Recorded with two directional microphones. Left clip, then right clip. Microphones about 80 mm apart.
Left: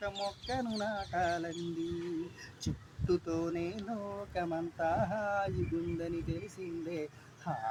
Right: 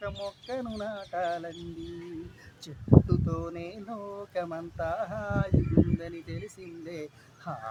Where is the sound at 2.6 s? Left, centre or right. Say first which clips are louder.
Right 11 dB; centre.